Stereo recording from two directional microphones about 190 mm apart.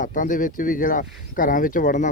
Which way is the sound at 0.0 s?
45° left (ahead or behind).